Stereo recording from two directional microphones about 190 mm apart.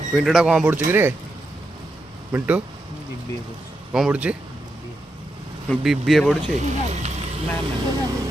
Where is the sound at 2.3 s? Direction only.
10° right (ahead or behind).